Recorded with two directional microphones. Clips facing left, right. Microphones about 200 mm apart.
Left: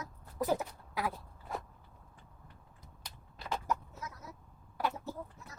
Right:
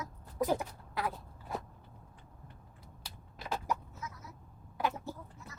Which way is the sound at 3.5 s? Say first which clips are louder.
Even; 10° right (ahead or behind).